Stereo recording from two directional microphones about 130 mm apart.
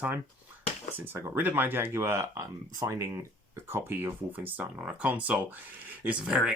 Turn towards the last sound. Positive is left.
turn(degrees=-5)  # may be behind; listen again after turning